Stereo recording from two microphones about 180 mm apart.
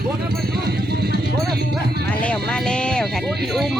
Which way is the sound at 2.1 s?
5° left (ahead or behind).